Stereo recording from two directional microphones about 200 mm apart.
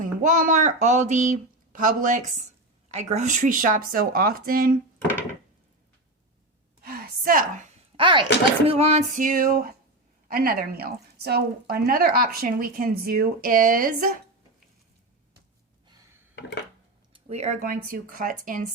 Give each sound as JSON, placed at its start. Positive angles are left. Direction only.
{"t": 0.0, "sound": "a woman's voice", "side_deg": -40}
{"t": 6.8, "sound": "a sound", "side_deg": -50}
{"t": 7.9, "sound": "a woman's voice", "side_deg": -25}
{"t": 17.1, "sound": "speech", "side_deg": -30}